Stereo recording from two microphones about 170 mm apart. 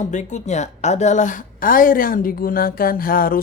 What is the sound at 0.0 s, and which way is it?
A woman's voice, 45° left (ahead or behind).